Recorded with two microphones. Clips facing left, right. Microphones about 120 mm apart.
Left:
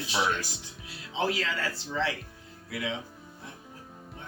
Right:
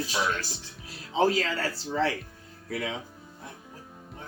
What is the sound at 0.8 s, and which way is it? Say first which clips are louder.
Speech: right 6 dB; 40° right (ahead or behind).